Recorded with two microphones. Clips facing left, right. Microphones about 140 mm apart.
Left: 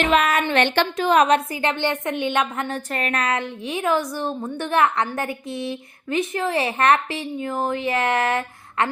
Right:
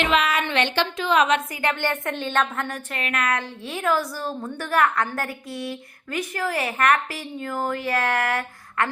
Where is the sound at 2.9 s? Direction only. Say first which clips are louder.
Left 2 dB; 40° left (ahead or behind).